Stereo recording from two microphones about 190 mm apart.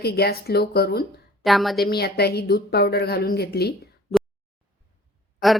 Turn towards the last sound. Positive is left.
turn(degrees=0)  # may be behind; listen again after turning